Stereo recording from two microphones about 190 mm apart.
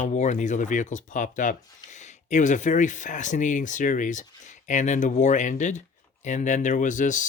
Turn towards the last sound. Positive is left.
turn(degrees=40)  # may be behind; listen again after turning